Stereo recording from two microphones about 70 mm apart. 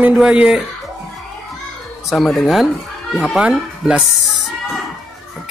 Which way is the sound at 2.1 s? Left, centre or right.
Centre.